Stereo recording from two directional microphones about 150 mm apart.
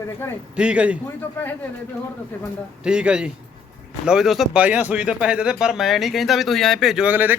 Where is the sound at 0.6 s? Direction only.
10° right (ahead or behind).